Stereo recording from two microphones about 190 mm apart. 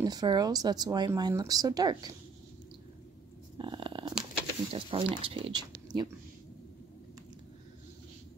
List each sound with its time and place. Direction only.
0.0 s speech: 20° right (ahead or behind)
3.5 s purr: 25° right (ahead or behind)
4.2 s speech: 30° right (ahead or behind)